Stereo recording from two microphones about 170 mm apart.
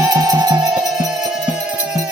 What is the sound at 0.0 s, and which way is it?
Music, 20° right (ahead or behind).